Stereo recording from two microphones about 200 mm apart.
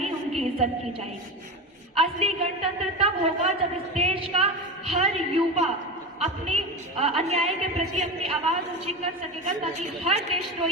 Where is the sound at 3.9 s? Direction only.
30° right (ahead or behind).